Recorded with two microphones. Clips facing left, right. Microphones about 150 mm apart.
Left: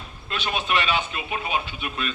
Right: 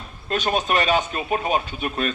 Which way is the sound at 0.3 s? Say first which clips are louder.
Right 5 dB; 45° right (ahead or behind).